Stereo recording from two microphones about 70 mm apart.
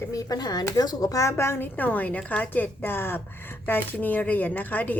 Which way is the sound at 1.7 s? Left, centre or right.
Left.